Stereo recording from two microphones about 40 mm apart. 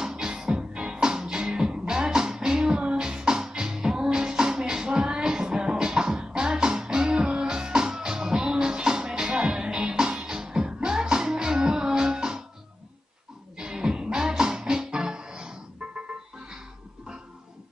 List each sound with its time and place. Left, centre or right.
0.0 s music: centre
13.6 s music: centre